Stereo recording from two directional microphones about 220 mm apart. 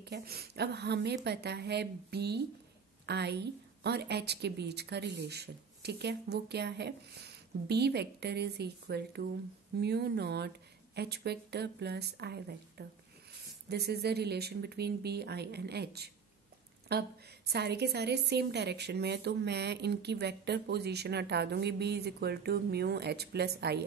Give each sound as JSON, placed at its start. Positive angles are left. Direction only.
{"t": 0.0, "sound": "a woman's voice", "side_deg": -45}